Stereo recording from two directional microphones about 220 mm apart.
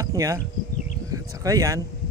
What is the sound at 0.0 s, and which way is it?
Insect, 15° right (ahead or behind).